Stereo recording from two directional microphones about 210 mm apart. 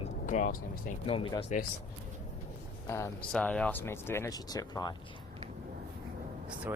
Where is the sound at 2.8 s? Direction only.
15° left (ahead or behind).